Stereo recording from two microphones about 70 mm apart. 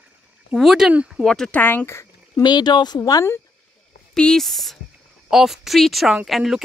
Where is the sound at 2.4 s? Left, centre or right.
Left.